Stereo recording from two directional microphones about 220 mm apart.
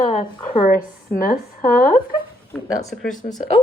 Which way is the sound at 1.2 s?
40° left (ahead or behind).